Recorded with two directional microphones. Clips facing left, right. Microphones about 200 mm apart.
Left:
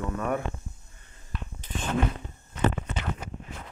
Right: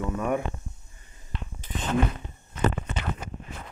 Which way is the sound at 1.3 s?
25° right (ahead or behind).